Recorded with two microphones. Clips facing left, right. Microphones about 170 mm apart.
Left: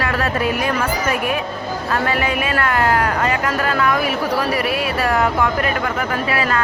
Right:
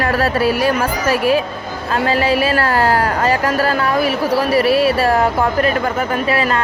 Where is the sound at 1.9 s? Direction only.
30° right (ahead or behind).